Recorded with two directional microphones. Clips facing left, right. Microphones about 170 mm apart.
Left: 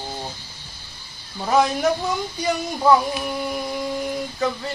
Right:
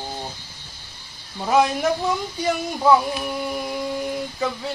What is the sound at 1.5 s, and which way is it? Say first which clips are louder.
Speech: even; 5° right (ahead or behind).